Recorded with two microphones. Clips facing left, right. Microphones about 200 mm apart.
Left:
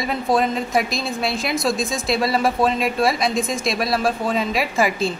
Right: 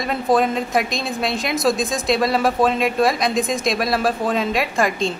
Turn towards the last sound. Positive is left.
turn(degrees=5)  # may be behind; listen again after turning